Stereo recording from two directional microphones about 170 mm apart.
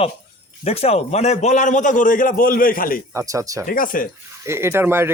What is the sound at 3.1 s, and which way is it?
Speech, 15° right (ahead or behind).